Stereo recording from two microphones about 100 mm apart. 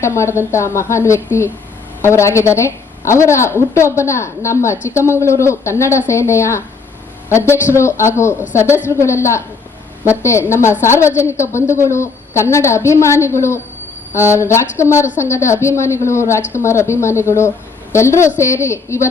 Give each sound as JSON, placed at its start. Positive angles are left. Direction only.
{"t": 0.0, "sound": "a woman's voice", "side_deg": 30}